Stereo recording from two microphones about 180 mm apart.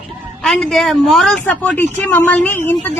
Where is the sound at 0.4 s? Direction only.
Centre (ahead or behind).